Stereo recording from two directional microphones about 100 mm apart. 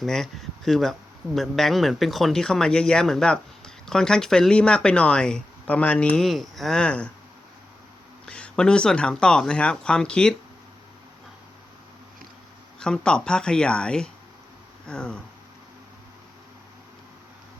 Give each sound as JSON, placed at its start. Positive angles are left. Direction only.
{"t": 0.0, "sound": "a man's voice", "side_deg": 0}
{"t": 6.2, "sound": "a man's voice", "side_deg": 0}
{"t": 8.3, "sound": "speech", "side_deg": 10}
{"t": 12.8, "sound": "speech", "side_deg": 10}